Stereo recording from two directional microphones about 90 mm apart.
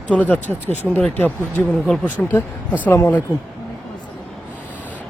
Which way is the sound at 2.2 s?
5° left (ahead or behind).